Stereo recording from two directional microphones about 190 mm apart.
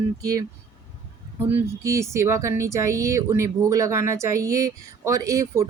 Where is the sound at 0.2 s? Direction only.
20° right (ahead or behind).